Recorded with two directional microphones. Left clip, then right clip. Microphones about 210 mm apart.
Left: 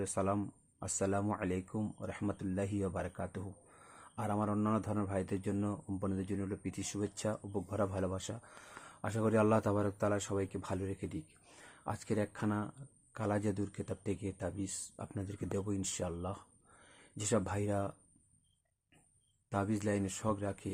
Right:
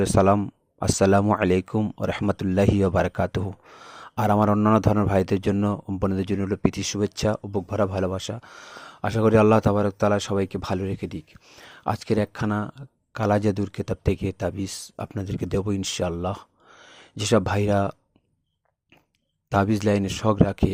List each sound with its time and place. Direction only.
0.0 s speech: 40° right (ahead or behind)
19.5 s speech: 40° right (ahead or behind)